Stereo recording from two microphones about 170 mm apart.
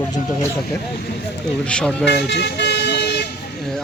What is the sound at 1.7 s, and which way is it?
Speech, 5° left (ahead or behind).